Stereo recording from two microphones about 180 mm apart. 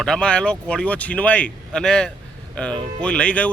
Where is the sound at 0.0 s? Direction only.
5° left (ahead or behind).